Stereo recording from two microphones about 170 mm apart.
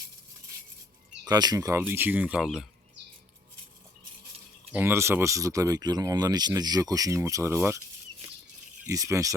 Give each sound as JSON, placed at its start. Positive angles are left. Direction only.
{"t": 1.2, "sound": "speech", "side_deg": -25}
{"t": 4.7, "sound": "speech", "side_deg": -15}
{"t": 8.9, "sound": "speech", "side_deg": -20}